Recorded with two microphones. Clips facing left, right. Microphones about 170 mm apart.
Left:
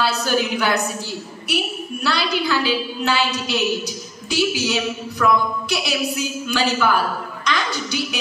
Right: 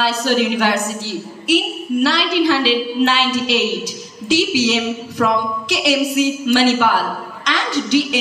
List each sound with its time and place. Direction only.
0.0 s speech: 90° right